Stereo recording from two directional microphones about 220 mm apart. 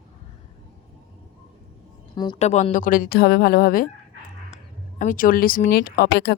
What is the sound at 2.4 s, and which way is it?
Speech, 30° left (ahead or behind).